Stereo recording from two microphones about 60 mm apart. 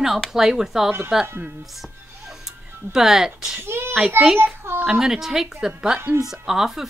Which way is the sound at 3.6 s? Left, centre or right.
Right.